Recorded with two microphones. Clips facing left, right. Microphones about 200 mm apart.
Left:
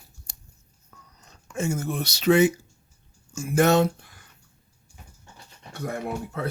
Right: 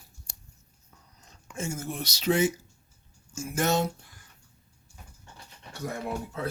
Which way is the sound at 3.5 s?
65° left (ahead or behind).